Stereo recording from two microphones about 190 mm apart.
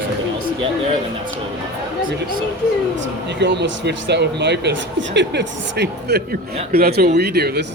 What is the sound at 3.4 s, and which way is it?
Speech, 65° right (ahead or behind).